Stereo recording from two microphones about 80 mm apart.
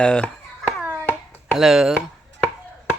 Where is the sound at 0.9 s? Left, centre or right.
Right.